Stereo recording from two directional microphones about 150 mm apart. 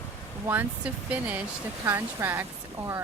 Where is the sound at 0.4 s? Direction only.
10° right (ahead or behind).